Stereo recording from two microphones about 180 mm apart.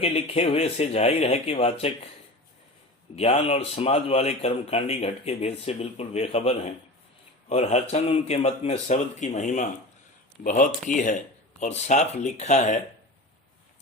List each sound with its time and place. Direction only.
0.0 s speech: 35° left (ahead or behind)
3.2 s speech: 35° left (ahead or behind)